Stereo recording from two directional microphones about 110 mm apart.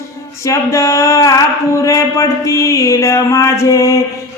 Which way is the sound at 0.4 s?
30° left (ahead or behind).